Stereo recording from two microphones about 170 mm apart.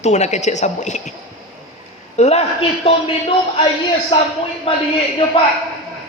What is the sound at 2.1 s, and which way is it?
Speech, 40° left (ahead or behind).